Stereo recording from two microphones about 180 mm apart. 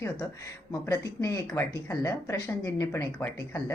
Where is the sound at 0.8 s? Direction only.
15° left (ahead or behind).